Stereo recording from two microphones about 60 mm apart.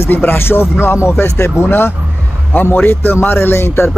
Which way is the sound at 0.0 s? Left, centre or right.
Left.